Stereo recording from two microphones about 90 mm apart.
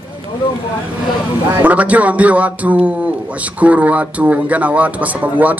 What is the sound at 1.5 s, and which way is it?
Speech, 20° right (ahead or behind).